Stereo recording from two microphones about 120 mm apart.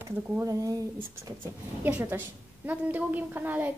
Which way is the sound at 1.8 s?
15° right (ahead or behind).